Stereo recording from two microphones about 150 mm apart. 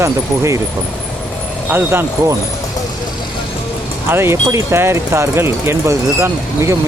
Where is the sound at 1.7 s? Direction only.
15° right (ahead or behind).